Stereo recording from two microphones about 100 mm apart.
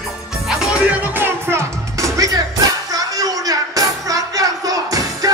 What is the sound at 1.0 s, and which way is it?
Music, 20° right (ahead or behind).